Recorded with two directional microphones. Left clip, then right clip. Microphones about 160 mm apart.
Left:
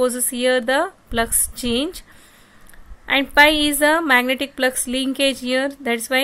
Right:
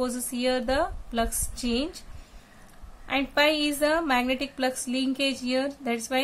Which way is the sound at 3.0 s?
45° left (ahead or behind).